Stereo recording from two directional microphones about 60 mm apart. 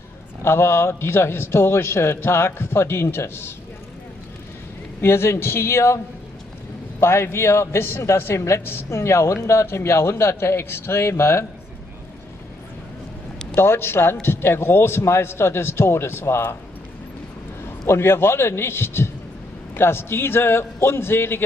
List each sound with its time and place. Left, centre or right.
0.4 s a man's voice: left
5.0 s a man's voice: left
7.0 s a man's voice: left
13.6 s a man's voice: left
17.8 s a man's voice: left